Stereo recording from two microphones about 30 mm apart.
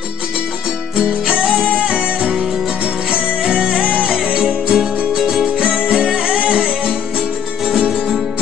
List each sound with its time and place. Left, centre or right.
1.8 s music: right
4.7 s music: centre
5.6 s music: right
6.9 s music: centre